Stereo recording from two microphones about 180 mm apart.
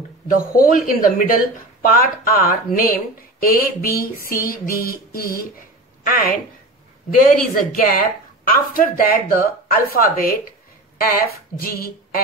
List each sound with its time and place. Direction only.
0.3 s speech: 50° left (ahead or behind)